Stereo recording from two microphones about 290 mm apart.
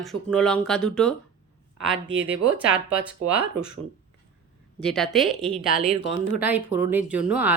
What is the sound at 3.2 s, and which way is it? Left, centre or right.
Speech, right.